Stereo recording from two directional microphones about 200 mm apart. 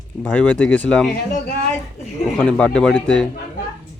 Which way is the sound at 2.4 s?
5° left (ahead or behind).